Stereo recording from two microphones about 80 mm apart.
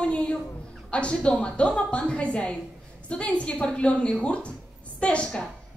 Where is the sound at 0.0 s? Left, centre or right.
Centre.